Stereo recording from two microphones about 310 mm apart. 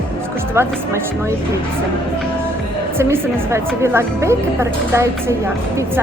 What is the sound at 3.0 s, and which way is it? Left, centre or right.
A woman's voice, centre.